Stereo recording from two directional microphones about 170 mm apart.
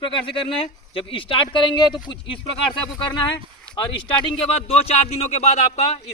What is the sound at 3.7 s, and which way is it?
Speech, 30° left (ahead or behind).